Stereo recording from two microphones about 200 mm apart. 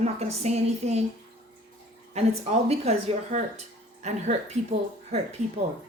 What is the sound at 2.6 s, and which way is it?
A woman's voice, 30° right (ahead or behind).